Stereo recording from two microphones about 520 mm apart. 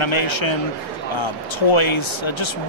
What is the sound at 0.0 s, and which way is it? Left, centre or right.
Speech, left.